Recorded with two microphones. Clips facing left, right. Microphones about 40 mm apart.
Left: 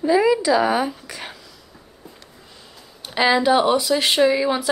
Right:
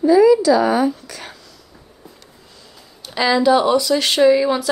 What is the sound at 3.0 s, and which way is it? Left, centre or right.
A woman's voice, left.